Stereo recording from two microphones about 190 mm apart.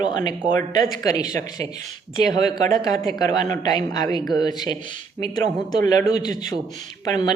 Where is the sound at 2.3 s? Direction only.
20° left (ahead or behind).